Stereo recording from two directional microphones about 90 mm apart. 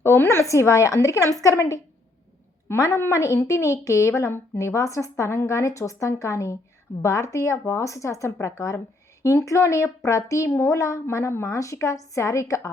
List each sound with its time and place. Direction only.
0.0 s a woman's voice: 30° left (ahead or behind)